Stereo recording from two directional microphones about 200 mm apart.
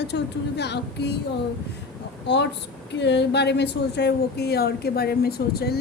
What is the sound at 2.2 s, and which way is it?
A woman's voice, 60° left (ahead or behind).